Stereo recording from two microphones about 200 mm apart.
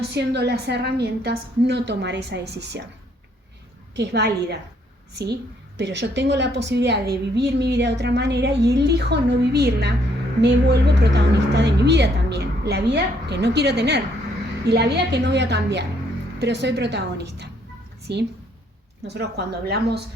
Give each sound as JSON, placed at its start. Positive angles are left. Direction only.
{"t": 0.1, "sound": "a woman's voice", "side_deg": -55}
{"t": 3.9, "sound": "a woman's voice", "side_deg": -60}